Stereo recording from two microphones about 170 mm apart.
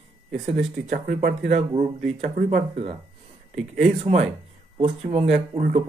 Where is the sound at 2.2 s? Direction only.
45° right (ahead or behind).